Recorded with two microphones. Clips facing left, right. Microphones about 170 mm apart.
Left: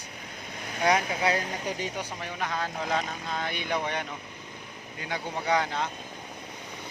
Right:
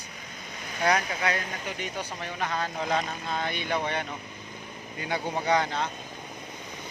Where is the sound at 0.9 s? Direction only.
25° left (ahead or behind).